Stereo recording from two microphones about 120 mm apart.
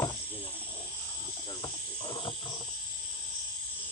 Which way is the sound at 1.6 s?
35° left (ahead or behind).